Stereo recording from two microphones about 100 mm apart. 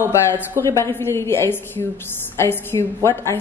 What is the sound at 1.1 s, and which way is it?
Speech, 25° left (ahead or behind).